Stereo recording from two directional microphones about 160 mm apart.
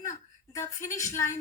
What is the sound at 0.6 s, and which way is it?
Speech, 50° left (ahead or behind).